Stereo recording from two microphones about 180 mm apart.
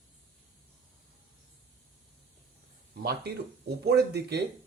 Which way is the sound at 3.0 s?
65° right (ahead or behind).